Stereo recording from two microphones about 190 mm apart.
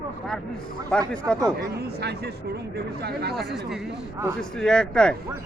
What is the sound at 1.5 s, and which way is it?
Speech, 60° right (ahead or behind).